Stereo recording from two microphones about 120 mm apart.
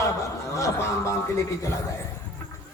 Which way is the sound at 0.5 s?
25° left (ahead or behind).